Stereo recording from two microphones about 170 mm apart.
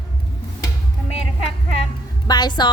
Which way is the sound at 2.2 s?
25° left (ahead or behind).